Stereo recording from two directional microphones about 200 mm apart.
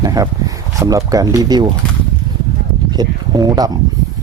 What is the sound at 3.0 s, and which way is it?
Speech, 20° right (ahead or behind).